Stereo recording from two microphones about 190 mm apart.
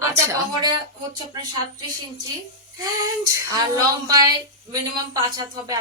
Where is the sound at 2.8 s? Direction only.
20° right (ahead or behind).